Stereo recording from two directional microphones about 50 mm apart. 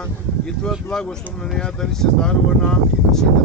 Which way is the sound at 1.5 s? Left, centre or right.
Centre.